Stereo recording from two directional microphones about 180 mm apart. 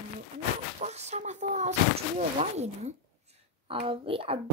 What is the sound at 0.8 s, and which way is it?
Speech, 40° right (ahead or behind).